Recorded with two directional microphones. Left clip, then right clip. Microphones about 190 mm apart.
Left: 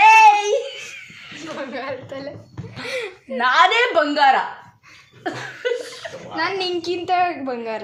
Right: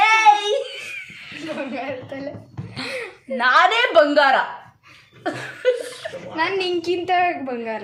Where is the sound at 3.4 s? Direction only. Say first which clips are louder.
Even; 15° right (ahead or behind).